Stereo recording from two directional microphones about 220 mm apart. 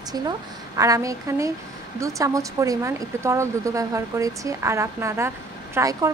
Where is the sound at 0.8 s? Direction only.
15° right (ahead or behind).